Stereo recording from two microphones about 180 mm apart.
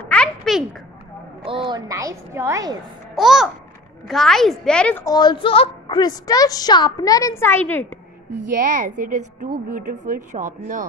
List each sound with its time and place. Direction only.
0.0 s a sound: 5° left (ahead or behind)
1.4 s a woman's voice: 30° right (ahead or behind)
3.2 s a woman's voice: centre (ahead or behind)
5.0 s a woman's voice: 25° left (ahead or behind)
8.5 s a woman's voice: 45° right (ahead or behind)